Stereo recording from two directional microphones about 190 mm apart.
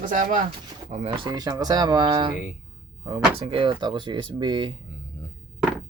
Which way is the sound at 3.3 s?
30° right (ahead or behind).